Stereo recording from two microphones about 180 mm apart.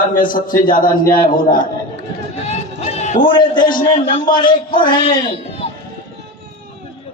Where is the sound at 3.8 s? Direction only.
30° left (ahead or behind).